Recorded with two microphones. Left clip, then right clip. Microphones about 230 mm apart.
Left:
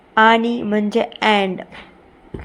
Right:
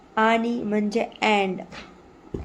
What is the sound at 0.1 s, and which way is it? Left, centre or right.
A woman's voice, centre.